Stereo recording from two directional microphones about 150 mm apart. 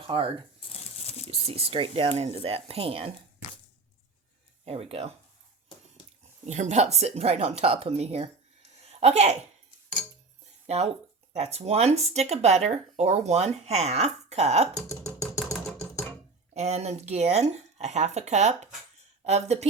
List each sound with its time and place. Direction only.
0.1 s speech: 35° right (ahead or behind)
0.6 s crumpling: 45° left (ahead or behind)
1.3 s speech: 40° right (ahead or behind)
4.6 s speech: 40° right (ahead or behind)
6.4 s speech: 50° right (ahead or behind)
8.8 s a sound: 45° right (ahead or behind)
10.7 s speech: 45° right (ahead or behind)
15.5 s music: 5° left (ahead or behind)
16.6 s speech: 45° right (ahead or behind)